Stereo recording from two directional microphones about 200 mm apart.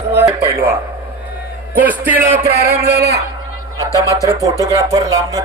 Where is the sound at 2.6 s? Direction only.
55° right (ahead or behind).